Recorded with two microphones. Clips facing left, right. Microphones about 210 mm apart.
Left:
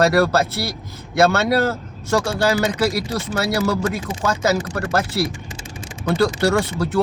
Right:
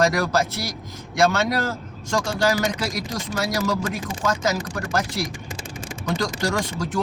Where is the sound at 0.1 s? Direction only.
65° left (ahead or behind).